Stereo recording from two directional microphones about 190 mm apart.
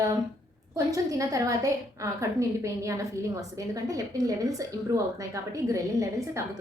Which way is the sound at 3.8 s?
20° right (ahead or behind).